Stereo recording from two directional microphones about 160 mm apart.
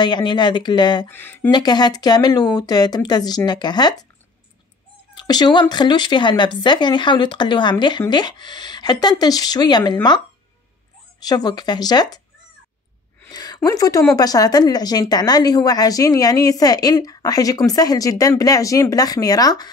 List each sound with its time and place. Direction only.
0.0 s speech: 25° left (ahead or behind)
1.1 s speech: 10° left (ahead or behind)
1.5 s speech: 25° left (ahead or behind)
5.1 s speech: 25° left (ahead or behind)
11.2 s speech: 25° left (ahead or behind)
13.3 s a sound: 25° left (ahead or behind)
13.7 s speech: 20° left (ahead or behind)